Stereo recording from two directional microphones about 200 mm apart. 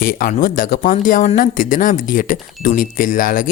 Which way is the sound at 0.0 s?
45° left (ahead or behind).